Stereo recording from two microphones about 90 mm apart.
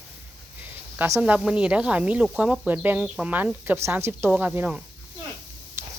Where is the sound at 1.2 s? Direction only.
15° right (ahead or behind).